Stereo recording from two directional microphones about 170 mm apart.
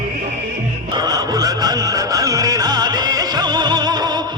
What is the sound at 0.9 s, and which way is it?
Music, 25° right (ahead or behind).